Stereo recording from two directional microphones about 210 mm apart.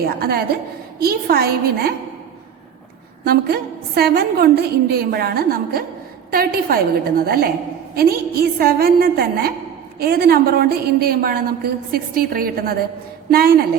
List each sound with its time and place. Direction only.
0.1 s a woman's voice: 50° right (ahead or behind)
3.2 s a woman's voice: 50° right (ahead or behind)